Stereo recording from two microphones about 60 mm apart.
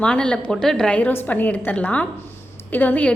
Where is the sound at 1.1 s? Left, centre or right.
Left.